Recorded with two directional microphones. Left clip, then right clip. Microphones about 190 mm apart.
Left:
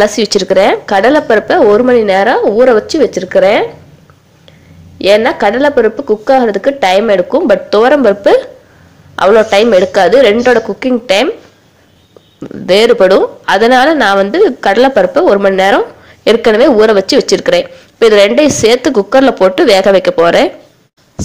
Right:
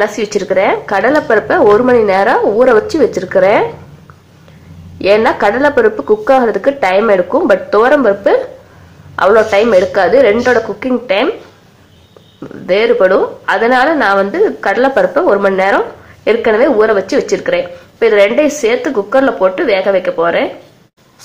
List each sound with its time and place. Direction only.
0.0 s speech: 25° left (ahead or behind)
4.9 s speech: 20° left (ahead or behind)
12.6 s a woman's voice: 30° left (ahead or behind)